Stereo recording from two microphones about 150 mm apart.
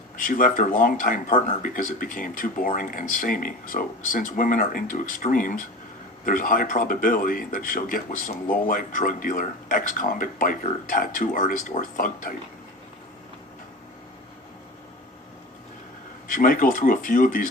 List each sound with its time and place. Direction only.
0.2 s speech: 65° left (ahead or behind)
16.3 s speech: 70° left (ahead or behind)